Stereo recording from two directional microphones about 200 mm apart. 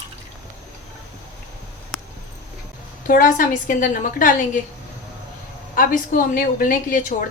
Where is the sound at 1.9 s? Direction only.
Centre (ahead or behind).